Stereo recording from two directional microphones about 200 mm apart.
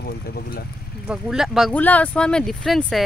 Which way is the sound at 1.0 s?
Centre (ahead or behind).